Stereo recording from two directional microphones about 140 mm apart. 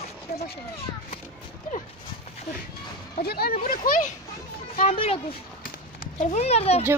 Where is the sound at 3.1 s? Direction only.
90° left.